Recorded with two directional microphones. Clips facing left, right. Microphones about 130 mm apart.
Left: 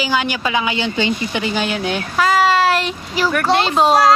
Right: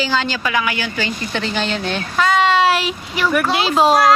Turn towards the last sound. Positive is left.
turn(degrees=0)  # may be behind; listen again after turning